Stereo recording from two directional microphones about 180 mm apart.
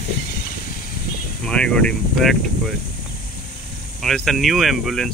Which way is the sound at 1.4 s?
5° left (ahead or behind).